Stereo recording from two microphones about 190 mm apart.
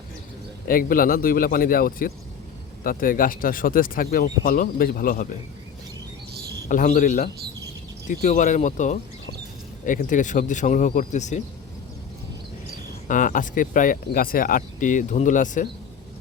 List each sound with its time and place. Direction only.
0.7 s speech: 50° left (ahead or behind)
6.7 s speech: 45° left (ahead or behind)
13.1 s speech: 45° left (ahead or behind)